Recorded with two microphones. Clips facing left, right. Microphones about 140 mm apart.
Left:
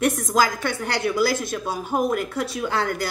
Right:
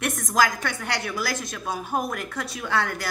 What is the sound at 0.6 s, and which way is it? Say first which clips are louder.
Speech: left 4 dB; 25° left (ahead or behind).